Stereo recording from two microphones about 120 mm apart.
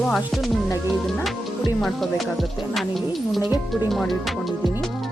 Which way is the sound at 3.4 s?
35° left (ahead or behind).